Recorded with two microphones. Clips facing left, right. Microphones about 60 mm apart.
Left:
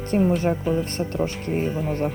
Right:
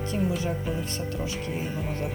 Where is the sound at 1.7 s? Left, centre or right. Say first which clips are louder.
Left 6 dB; centre.